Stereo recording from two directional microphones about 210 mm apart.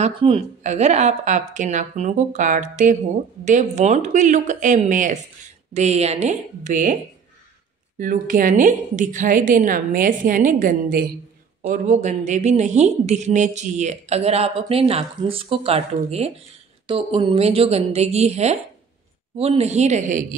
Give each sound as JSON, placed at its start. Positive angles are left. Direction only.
{"t": 0.0, "sound": "a woman's voice", "side_deg": -30}
{"t": 8.0, "sound": "a woman's voice", "side_deg": -40}